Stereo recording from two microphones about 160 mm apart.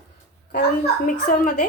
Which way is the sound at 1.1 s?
55° left (ahead or behind).